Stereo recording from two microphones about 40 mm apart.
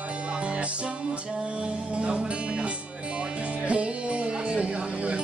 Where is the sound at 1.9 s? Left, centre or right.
Right.